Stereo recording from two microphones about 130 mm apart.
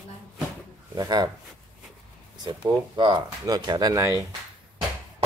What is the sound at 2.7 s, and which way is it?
Speech, 35° right (ahead or behind).